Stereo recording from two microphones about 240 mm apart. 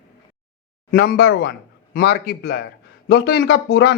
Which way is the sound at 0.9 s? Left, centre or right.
Left.